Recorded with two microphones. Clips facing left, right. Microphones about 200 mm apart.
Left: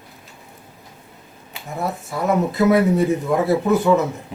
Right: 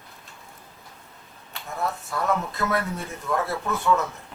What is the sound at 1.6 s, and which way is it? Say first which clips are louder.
Speech: left 4 dB; 15° left (ahead or behind).